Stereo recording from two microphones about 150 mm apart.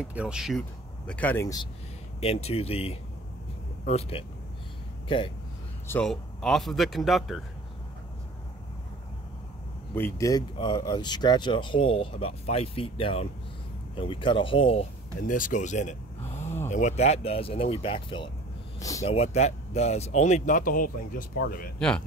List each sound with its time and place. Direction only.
0.0 s speech: 5° right (ahead or behind); by 1.6 s 15° left (ahead or behind)
2.1 s speech: 45° left (ahead or behind)
5.9 s a man's voice: 5° left (ahead or behind)
9.9 s speech: 20° left (ahead or behind); by 14.9 s 40° left (ahead or behind)
15.2 s speech: 60° left (ahead or behind); by 18.3 s 35° left (ahead or behind)
18.8 s speech: 20° left (ahead or behind)
19.0 s speech: 45° left (ahead or behind); by 21.6 s 75° left (ahead or behind)
21.7 s a man's voice: 5° left (ahead or behind)